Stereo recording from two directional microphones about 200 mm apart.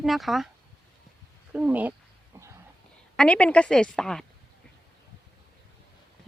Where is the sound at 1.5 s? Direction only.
5° right (ahead or behind).